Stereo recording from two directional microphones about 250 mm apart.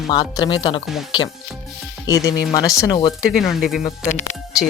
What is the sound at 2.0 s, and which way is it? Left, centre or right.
Speech, centre.